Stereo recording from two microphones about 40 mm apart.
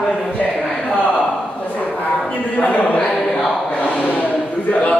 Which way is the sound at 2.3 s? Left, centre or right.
Left.